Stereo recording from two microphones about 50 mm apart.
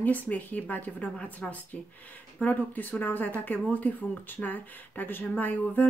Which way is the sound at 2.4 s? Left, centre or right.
Left.